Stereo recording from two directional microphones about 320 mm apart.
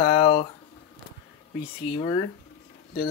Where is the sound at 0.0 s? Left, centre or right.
Centre.